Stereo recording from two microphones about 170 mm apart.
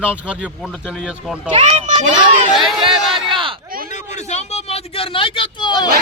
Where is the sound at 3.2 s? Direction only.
30° right (ahead or behind).